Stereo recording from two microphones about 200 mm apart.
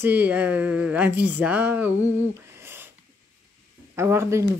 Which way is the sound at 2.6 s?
10° right (ahead or behind).